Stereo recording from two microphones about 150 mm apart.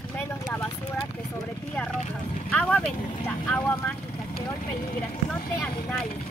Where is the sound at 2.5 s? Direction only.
10° left (ahead or behind).